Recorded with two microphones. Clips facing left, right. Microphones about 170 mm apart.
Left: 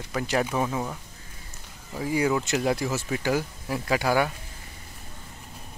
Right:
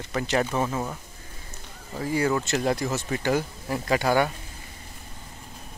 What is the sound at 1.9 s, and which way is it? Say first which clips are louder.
Speech: even; 10° left (ahead or behind).